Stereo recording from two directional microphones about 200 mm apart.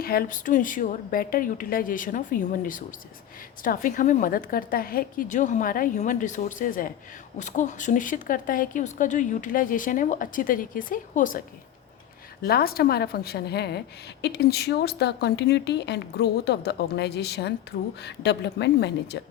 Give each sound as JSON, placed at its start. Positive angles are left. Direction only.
{"t": 0.0, "sound": "a woman's voice", "side_deg": 50}